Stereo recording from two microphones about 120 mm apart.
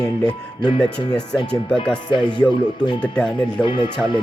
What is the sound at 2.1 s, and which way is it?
Speech, 40° left (ahead or behind).